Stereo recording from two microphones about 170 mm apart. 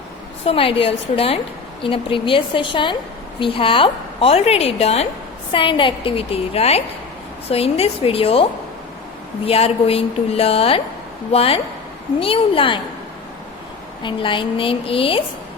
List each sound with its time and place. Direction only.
0.4 s a woman's voice: 35° left (ahead or behind)
9.5 s a woman's voice: 35° left (ahead or behind)
14.0 s a woman's voice: 30° left (ahead or behind)